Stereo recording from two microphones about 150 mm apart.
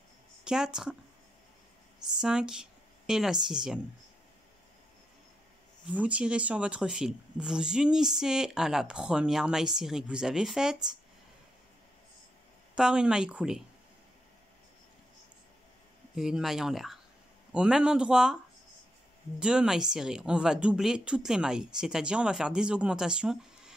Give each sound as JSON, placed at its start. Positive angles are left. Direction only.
{"t": 0.4, "sound": "speech", "side_deg": -5}
{"t": 2.1, "sound": "speech", "side_deg": -5}
{"t": 5.9, "sound": "speech", "side_deg": -10}
{"t": 12.7, "sound": "speech", "side_deg": -5}
{"t": 16.2, "sound": "speech", "side_deg": -5}
{"t": 19.4, "sound": "speech", "side_deg": -5}